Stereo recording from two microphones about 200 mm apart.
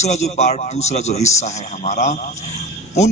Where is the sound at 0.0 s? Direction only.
35° left (ahead or behind).